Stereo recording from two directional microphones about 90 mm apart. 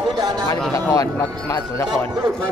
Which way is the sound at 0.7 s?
40° left (ahead or behind).